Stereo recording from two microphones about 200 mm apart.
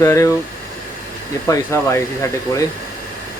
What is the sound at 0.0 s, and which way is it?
Speech, 15° left (ahead or behind).